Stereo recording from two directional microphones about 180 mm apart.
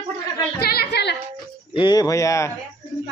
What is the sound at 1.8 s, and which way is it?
Speech, 20° left (ahead or behind).